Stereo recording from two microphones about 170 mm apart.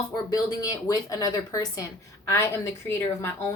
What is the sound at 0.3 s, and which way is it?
A woman's voice, 20° left (ahead or behind).